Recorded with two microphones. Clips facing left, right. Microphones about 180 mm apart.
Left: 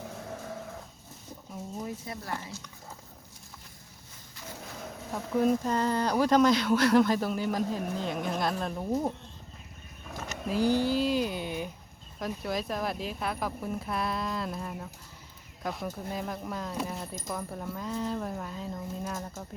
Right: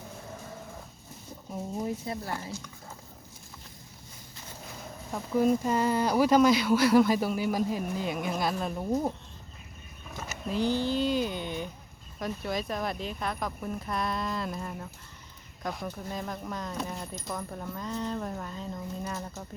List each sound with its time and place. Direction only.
1.8 s speech: 25° right (ahead or behind)
5.4 s speech: 5° right (ahead or behind)
10.2 s speech: 5° left (ahead or behind)